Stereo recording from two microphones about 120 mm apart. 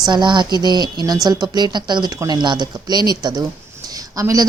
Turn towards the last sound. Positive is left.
turn(degrees=-30)  # may be behind; listen again after turning